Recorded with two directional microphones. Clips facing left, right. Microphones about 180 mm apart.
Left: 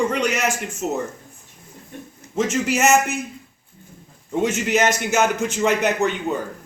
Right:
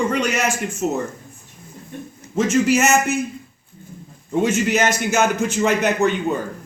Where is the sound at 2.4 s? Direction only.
20° left (ahead or behind).